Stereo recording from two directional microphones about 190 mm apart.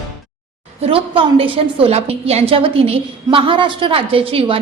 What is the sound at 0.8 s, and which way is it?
A woman's voice, 30° right (ahead or behind).